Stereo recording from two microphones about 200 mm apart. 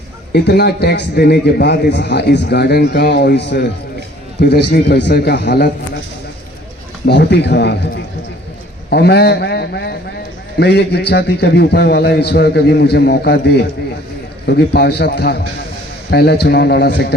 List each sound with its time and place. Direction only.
0.3 s a man's voice: 55° left (ahead or behind)
7.0 s a man's voice: 60° left (ahead or behind)